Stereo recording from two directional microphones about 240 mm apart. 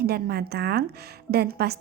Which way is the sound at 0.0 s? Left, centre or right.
Right.